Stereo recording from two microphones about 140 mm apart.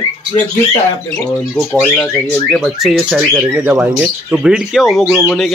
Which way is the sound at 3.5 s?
15° right (ahead or behind).